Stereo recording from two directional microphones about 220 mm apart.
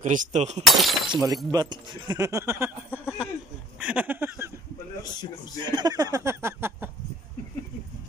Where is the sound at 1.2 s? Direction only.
15° right (ahead or behind).